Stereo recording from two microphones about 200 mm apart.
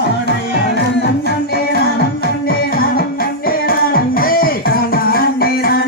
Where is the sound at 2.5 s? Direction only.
45° left (ahead or behind).